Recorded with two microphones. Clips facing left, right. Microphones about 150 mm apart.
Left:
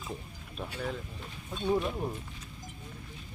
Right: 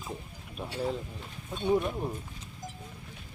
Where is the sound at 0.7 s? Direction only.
30° right (ahead or behind).